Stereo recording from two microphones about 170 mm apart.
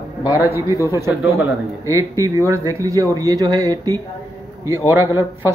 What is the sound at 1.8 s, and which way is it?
A man's voice, 20° right (ahead or behind).